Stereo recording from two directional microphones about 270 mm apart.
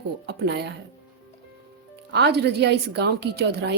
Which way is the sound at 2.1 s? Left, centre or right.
Right.